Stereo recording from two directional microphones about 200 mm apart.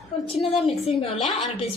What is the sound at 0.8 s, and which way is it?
Speech, 30° left (ahead or behind).